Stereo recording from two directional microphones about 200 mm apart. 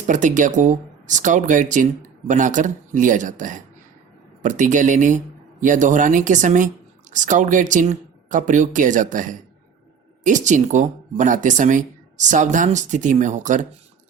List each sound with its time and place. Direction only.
0.1 s speech: 40° right (ahead or behind)